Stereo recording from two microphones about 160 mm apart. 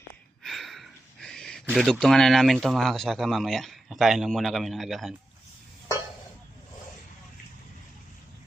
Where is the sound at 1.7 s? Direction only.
Centre (ahead or behind).